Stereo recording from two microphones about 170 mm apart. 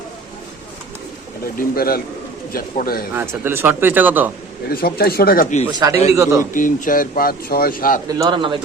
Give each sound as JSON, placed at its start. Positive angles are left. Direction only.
{"t": 1.5, "sound": "speech", "side_deg": 60}
{"t": 3.2, "sound": "speech", "side_deg": -15}
{"t": 4.7, "sound": "speech", "side_deg": 65}
{"t": 5.8, "sound": "speech", "side_deg": -20}
{"t": 6.5, "sound": "speech", "side_deg": 50}
{"t": 8.0, "sound": "speech", "side_deg": -25}